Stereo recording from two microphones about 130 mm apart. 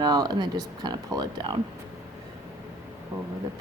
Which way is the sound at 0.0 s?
30° right (ahead or behind).